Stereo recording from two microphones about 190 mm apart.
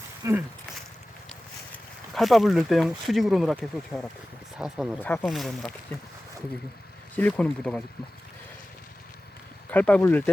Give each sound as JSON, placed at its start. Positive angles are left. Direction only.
{"t": 0.2, "sound": "speech", "side_deg": -15}
{"t": 2.1, "sound": "speech", "side_deg": 0}
{"t": 4.9, "sound": "speech", "side_deg": 10}
{"t": 7.2, "sound": "speech", "side_deg": 5}
{"t": 9.6, "sound": "speech", "side_deg": 10}